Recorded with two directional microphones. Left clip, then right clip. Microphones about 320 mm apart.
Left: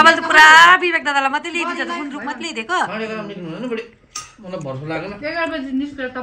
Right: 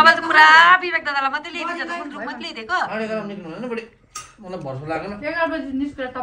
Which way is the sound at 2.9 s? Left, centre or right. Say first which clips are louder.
Even; right.